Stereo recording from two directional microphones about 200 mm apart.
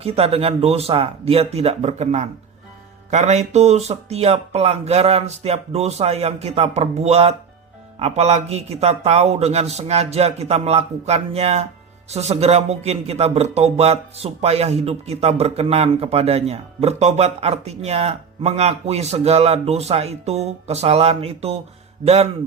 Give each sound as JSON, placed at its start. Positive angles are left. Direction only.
{"t": 0.0, "sound": "speech", "side_deg": -30}